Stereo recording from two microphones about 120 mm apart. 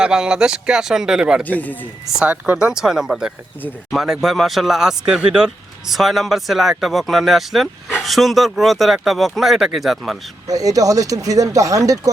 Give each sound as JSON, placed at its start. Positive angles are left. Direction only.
{"t": 0.0, "sound": "speech", "side_deg": -5}
{"t": 1.5, "sound": "speech", "side_deg": 15}
{"t": 2.0, "sound": "speech", "side_deg": -5}
{"t": 10.4, "sound": "speech", "side_deg": -30}